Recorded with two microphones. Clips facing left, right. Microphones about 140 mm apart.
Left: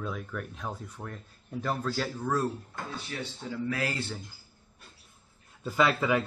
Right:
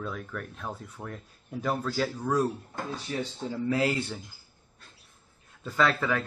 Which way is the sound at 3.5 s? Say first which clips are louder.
Right 5 dB; 25° right (ahead or behind).